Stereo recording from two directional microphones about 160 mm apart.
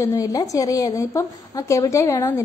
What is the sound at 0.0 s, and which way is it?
A woman's voice, 20° left (ahead or behind).